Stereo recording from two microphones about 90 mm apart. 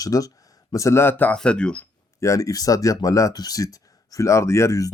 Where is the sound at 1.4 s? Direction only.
10° left (ahead or behind).